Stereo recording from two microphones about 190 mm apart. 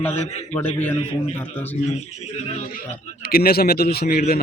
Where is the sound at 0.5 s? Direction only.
10° left (ahead or behind).